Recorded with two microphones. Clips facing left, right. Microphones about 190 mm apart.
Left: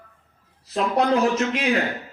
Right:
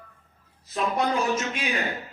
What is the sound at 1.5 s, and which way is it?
Speech, 90° left.